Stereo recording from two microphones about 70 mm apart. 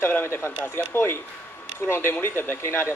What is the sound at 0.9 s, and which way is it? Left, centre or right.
Speech, left.